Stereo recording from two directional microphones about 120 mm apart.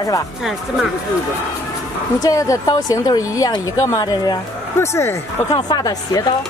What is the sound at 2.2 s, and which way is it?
Speech, 30° left (ahead or behind).